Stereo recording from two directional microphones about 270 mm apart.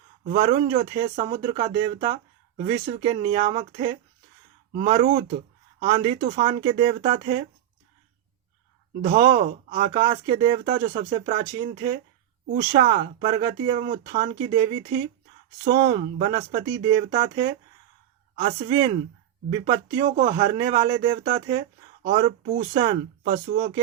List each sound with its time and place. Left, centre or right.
0.3 s speech: right
6.1 s speech: right
9.1 s speech: centre